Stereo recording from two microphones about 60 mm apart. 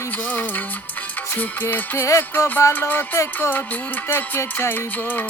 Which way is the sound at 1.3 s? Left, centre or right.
Left.